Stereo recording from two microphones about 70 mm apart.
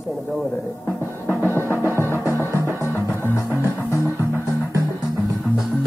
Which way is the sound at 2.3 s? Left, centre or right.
Right.